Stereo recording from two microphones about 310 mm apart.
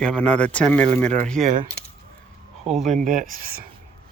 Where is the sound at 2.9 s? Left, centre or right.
Right.